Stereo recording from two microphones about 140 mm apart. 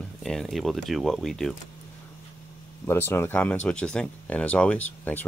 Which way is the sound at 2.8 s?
15° left (ahead or behind).